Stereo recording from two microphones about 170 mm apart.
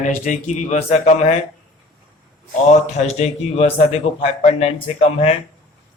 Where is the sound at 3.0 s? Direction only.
40° left (ahead or behind).